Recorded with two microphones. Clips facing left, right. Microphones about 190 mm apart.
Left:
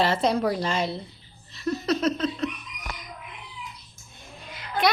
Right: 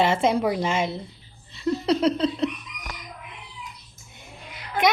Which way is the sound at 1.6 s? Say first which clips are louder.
Right 3 dB; 25° right (ahead or behind).